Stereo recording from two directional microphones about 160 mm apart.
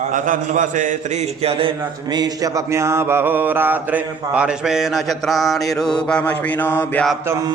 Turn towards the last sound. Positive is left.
turn(degrees=10)  # may be behind; listen again after turning